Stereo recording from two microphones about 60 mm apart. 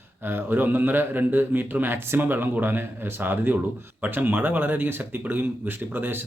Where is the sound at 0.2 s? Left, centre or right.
Right.